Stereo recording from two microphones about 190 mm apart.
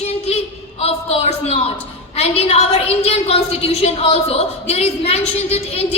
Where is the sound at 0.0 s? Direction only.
30° left (ahead or behind).